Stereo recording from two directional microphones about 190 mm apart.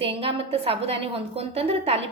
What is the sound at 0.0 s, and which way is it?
A woman's voice, 30° right (ahead or behind).